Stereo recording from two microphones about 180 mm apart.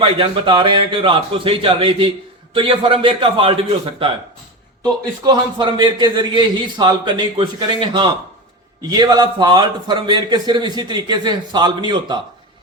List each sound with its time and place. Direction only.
0.0 s a man's voice: 30° right (ahead or behind)
5.2 s a man's voice: 25° right (ahead or behind)